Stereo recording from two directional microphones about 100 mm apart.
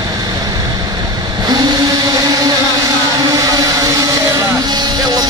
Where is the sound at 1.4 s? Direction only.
40° right (ahead or behind).